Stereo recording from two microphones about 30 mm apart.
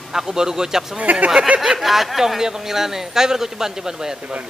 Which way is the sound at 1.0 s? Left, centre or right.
Right.